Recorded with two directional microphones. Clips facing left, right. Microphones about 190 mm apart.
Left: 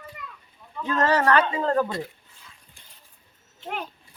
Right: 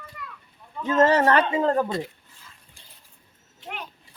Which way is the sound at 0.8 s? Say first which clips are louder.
Right 3 dB; 25° right (ahead or behind).